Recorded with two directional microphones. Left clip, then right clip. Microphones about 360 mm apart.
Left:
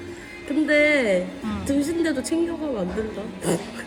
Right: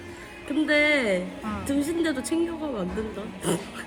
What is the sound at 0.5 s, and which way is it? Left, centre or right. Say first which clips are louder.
A woman's voice: left 3 dB; centre.